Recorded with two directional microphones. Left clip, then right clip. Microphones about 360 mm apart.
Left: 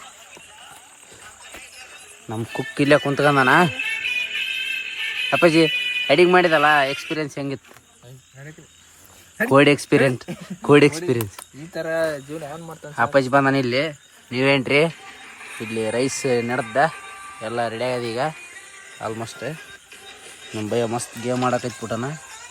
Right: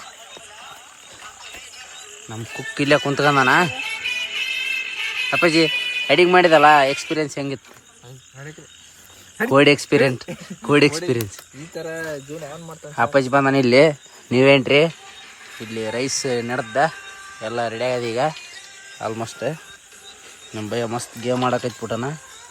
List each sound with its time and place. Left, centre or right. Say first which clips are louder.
2.3 s neigh: left 2 dB; centre
5.4 s speech: left 1 dB; centre
9.4 s speech: right 1 dB; centre
13.0 s speech: even; centre
15.0 s a sound: left 2 dB; centre
15.7 s speech: left 1 dB; centre
20.6 s speech: left 2 dB; centre